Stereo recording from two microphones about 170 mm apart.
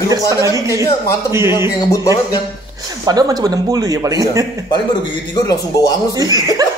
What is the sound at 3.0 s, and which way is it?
Speech, 20° right (ahead or behind).